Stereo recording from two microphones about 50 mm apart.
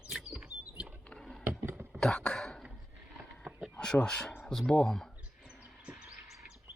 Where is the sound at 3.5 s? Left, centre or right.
Centre.